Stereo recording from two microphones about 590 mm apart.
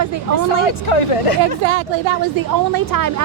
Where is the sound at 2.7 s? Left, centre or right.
Right.